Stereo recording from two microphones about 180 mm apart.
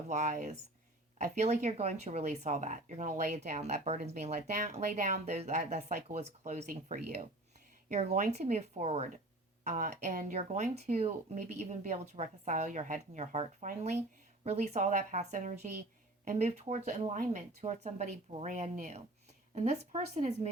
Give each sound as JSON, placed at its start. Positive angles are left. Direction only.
{"t": 0.1, "sound": "a woman's voice", "side_deg": -45}